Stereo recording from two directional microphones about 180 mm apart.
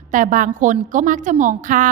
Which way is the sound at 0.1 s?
45° right (ahead or behind).